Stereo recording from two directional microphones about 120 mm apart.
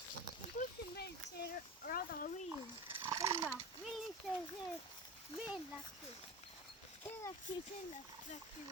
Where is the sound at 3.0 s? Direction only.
25° right (ahead or behind).